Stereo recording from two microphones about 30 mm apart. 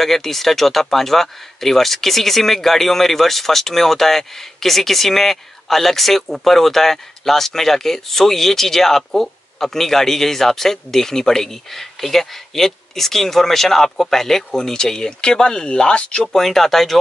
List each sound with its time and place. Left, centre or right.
0.0 s speech: centre
14.5 s speech: left
16.4 s speech: centre